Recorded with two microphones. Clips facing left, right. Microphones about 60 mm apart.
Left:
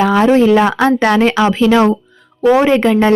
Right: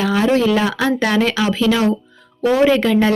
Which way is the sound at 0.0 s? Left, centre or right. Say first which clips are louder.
Left 6 dB; left.